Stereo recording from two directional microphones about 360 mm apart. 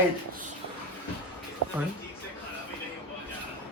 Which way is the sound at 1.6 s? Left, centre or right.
Right.